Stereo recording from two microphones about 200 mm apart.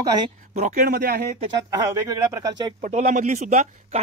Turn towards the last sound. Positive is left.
turn(degrees=-35)  # may be behind; listen again after turning